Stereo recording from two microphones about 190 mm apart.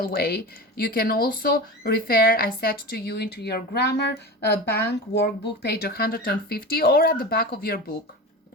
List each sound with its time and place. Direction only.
0.0 s speech: 55° left (ahead or behind)